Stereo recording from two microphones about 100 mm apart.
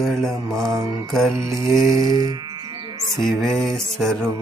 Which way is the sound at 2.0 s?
35° right (ahead or behind).